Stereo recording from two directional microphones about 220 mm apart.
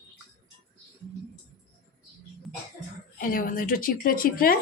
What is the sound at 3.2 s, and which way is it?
A woman's voice, 40° left (ahead or behind).